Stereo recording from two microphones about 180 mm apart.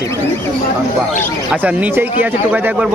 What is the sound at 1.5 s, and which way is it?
Speech, 10° right (ahead or behind).